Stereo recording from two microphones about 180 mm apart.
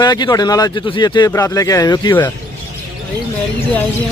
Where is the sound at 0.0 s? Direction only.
20° left (ahead or behind).